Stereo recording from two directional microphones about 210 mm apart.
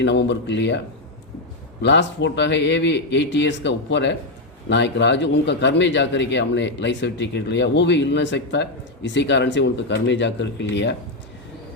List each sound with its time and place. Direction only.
0.0 s a man's voice: 55° left (ahead or behind)
1.8 s a man's voice: 55° left (ahead or behind)